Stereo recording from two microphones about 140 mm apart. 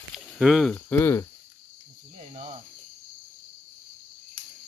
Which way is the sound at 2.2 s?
50° right (ahead or behind).